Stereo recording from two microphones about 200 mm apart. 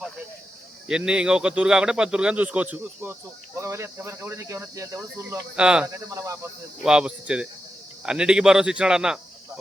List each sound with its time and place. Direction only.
0.9 s speech: 5° right (ahead or behind)
5.3 s speech: 5° right (ahead or behind)
6.1 s speech: 15° right (ahead or behind)
6.8 s speech: 5° right (ahead or behind)